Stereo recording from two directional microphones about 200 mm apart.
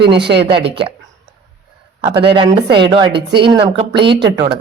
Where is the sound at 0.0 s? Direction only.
25° right (ahead or behind).